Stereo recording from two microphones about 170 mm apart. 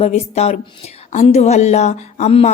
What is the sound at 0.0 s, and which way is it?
A woman's voice, 40° left (ahead or behind).